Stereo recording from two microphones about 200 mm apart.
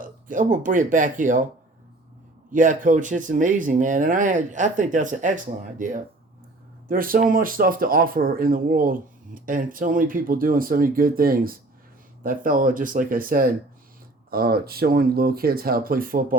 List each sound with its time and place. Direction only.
0.0 s speech: 40° right (ahead or behind)
2.5 s speech: 40° right (ahead or behind)
6.8 s speech: 45° right (ahead or behind)